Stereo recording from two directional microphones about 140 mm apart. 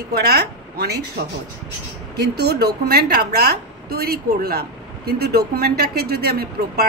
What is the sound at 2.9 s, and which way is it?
A woman's voice, 90° right.